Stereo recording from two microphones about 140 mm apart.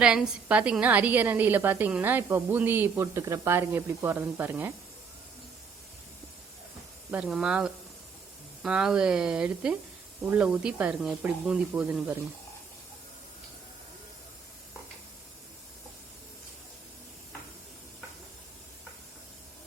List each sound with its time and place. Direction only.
0.0 s a woman's voice: 5° right (ahead or behind)
7.1 s a woman's voice: 5° right (ahead or behind)